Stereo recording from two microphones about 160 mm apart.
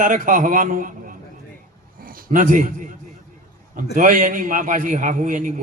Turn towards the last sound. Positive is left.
turn(degrees=-55)  # may be behind; listen again after turning